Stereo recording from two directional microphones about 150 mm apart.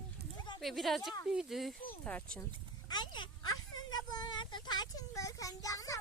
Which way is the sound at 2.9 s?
30° left (ahead or behind).